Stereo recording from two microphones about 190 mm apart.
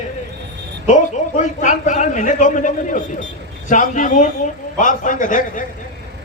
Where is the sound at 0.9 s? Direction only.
40° left (ahead or behind).